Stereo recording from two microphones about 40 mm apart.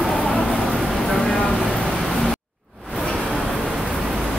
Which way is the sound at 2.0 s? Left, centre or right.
Centre.